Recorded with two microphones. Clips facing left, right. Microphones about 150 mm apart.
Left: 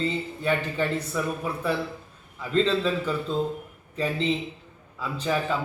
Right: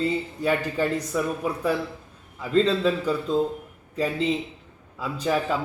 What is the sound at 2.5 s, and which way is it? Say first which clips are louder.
Speech: right 2 dB; 40° right (ahead or behind).